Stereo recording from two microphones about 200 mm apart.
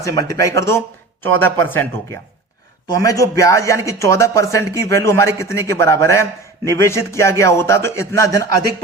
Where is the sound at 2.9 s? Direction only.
15° left (ahead or behind).